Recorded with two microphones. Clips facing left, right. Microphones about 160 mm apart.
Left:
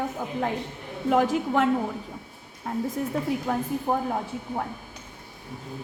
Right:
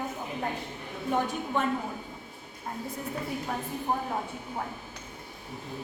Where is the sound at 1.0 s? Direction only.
90° left.